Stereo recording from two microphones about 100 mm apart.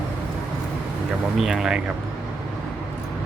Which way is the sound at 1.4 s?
5° right (ahead or behind).